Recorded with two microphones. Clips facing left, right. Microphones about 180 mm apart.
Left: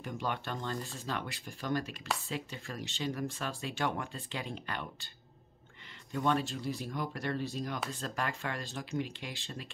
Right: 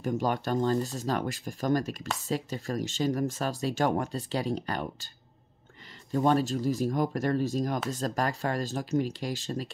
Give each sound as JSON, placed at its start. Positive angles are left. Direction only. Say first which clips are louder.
{"t": 0.0, "sound": "speech", "louder": "right 8 dB", "side_deg": -40}
{"t": 6.1, "sound": "speech", "louder": "right 7 dB", "side_deg": -40}